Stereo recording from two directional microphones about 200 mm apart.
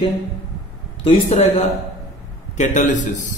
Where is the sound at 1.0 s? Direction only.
30° left (ahead or behind).